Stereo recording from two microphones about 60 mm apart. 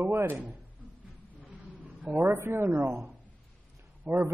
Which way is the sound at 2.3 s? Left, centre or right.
Right.